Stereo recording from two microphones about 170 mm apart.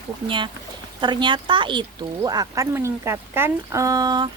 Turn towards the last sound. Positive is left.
turn(degrees=-25)  # may be behind; listen again after turning